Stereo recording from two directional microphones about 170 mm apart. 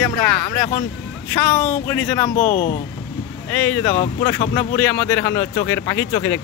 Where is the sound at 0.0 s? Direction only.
10° left (ahead or behind).